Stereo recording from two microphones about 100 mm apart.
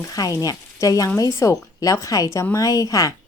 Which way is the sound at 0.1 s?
35° left (ahead or behind).